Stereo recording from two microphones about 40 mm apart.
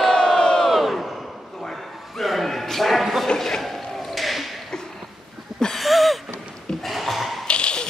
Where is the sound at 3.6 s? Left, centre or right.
Centre.